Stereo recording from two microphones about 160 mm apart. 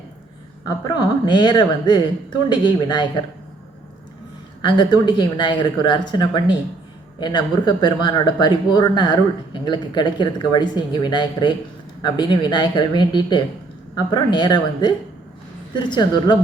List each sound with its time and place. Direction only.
0.9 s speech: 25° left (ahead or behind)
4.6 s speech: 30° left (ahead or behind)